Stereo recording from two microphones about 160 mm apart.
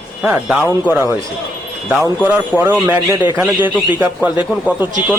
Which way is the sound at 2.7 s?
10° right (ahead or behind).